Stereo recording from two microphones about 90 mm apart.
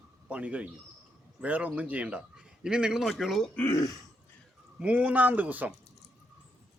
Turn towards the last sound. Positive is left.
turn(degrees=-20)  # may be behind; listen again after turning